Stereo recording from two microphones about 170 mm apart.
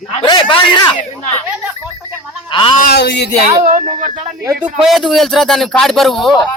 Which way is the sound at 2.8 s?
65° left (ahead or behind).